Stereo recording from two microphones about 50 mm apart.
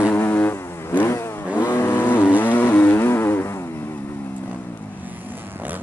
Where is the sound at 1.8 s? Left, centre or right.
Left.